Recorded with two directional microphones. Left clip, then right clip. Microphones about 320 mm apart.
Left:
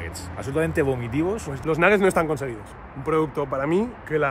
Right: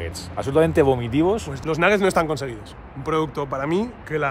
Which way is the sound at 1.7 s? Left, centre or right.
Centre.